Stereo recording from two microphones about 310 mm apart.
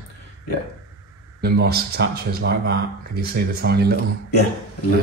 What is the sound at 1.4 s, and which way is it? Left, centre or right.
A man's voice, right.